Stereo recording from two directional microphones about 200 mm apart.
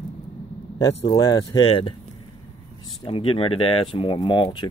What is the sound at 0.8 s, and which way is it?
Speech, 20° left (ahead or behind).